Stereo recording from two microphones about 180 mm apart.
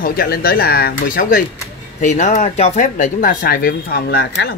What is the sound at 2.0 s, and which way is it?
Speech, 40° left (ahead or behind).